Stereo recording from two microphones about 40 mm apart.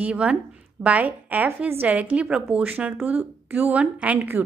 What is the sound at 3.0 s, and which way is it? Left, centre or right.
Speech, right.